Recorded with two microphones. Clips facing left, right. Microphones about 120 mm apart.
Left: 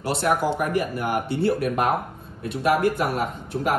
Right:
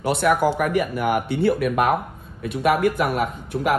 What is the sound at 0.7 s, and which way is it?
Speech, 65° right (ahead or behind).